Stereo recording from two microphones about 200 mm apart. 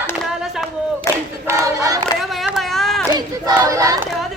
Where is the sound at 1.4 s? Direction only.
15° right (ahead or behind).